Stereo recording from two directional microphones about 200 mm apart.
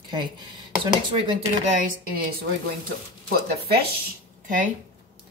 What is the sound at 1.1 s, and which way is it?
Speech, 25° right (ahead or behind).